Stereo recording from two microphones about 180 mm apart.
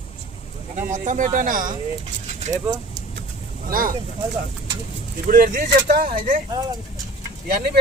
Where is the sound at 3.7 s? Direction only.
50° right (ahead or behind).